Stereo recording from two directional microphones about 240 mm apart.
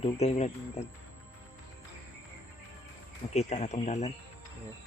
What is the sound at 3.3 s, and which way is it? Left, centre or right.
Speech, left.